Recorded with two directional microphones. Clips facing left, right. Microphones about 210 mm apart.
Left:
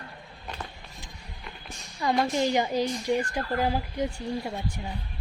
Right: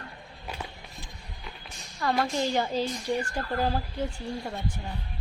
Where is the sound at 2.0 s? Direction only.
15° left (ahead or behind).